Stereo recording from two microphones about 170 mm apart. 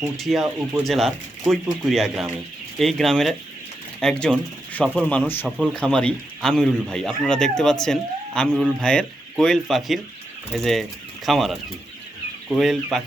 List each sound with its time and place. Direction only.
0.0 s speech: centre (ahead or behind)